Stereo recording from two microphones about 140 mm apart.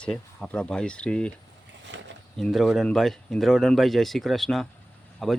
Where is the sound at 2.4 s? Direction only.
Centre (ahead or behind).